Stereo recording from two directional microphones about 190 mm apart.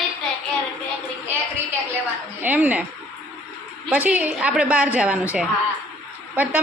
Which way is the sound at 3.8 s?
5° right (ahead or behind).